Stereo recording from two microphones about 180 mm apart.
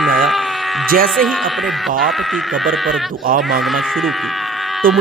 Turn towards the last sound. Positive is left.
turn(degrees=0)  # may be behind; listen again after turning